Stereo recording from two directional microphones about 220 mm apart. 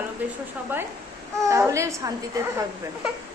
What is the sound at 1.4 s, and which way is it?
Speech, 15° right (ahead or behind).